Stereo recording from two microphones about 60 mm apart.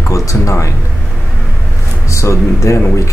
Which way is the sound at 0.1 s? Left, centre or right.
Left.